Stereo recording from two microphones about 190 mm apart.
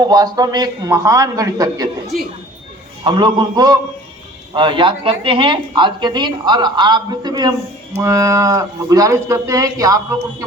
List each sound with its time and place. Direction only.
0.0 s a woman's voice: 20° right (ahead or behind)
3.0 s a woman's voice: 25° right (ahead or behind)